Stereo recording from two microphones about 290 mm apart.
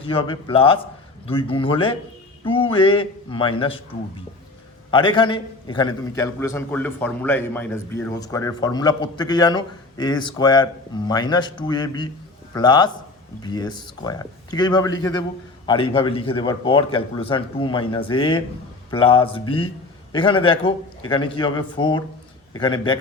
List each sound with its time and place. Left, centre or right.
0.0 s a man's voice: centre
4.9 s a man's voice: centre